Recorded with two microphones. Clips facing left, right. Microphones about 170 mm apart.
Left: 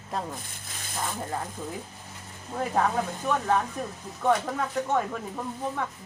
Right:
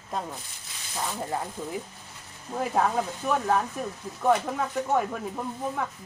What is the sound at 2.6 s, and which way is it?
Speech, 5° right (ahead or behind).